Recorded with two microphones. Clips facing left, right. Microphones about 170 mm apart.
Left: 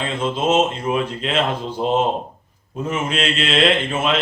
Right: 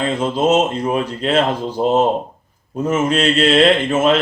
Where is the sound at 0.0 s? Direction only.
40° right (ahead or behind).